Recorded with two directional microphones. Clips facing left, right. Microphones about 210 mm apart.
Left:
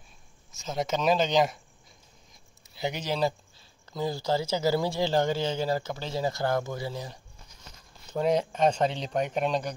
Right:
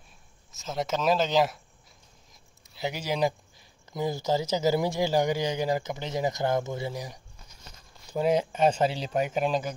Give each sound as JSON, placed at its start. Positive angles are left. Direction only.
{"t": 0.6, "sound": "speech", "side_deg": 0}
{"t": 2.6, "sound": "speech", "side_deg": 0}